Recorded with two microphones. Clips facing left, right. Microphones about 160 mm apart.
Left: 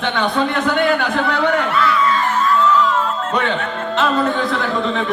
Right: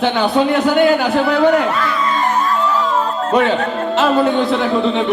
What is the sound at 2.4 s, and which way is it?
Music, 35° right (ahead or behind).